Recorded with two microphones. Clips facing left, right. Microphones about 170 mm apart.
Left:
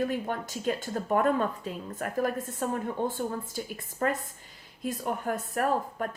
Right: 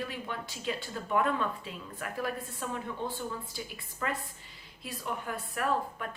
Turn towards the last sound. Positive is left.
turn(degrees=45)  # may be behind; listen again after turning